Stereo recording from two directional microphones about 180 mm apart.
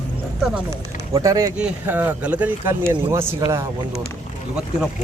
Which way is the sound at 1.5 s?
5° right (ahead or behind).